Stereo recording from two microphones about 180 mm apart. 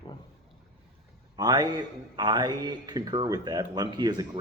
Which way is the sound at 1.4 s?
20° right (ahead or behind).